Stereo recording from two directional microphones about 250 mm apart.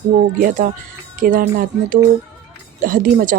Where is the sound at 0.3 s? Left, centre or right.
Right.